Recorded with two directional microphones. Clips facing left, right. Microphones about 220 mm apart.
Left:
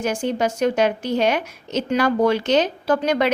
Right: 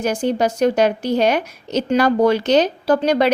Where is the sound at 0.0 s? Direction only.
35° right (ahead or behind).